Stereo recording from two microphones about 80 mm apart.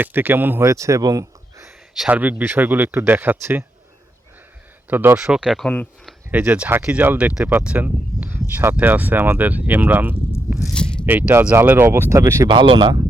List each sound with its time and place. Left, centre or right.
0.0 s speech: right
0.6 s speech: right
2.0 s speech: centre
4.9 s speech: right
5.1 s speech: centre
6.3 s speech: centre; by 12.5 s right
12.5 s speech: right